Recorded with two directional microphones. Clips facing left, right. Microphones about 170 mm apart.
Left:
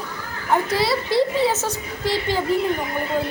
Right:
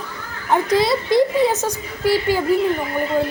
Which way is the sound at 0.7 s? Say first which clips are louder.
Right 4 dB; 20° right (ahead or behind).